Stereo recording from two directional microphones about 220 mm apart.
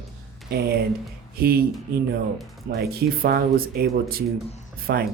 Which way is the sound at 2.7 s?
45° right (ahead or behind).